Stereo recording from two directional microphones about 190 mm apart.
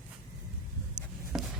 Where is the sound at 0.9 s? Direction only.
Centre (ahead or behind).